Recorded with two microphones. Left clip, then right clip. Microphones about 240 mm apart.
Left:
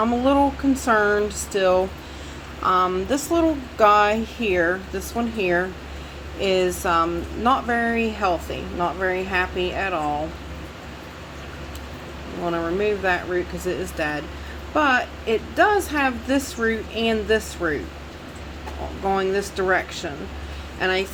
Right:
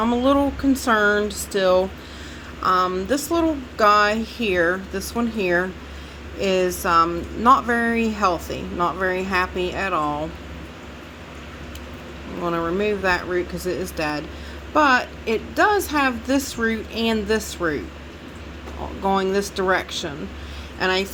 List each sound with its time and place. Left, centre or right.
0.0 s a woman's voice: right
2.6 s a woman's voice: centre; by 10.2 s right
12.5 s a woman's voice: right
19.0 s a woman's voice: right